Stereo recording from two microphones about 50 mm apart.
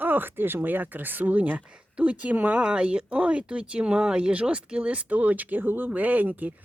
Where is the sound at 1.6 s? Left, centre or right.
Right.